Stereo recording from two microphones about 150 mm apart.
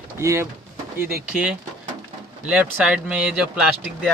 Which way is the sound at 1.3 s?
5° right (ahead or behind).